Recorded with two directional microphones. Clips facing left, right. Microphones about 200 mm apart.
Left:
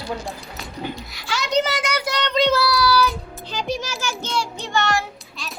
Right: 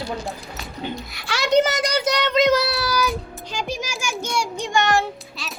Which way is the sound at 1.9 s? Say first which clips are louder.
Right 3 dB; 20° right (ahead or behind).